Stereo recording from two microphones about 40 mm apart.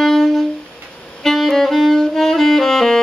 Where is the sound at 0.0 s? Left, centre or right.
Centre.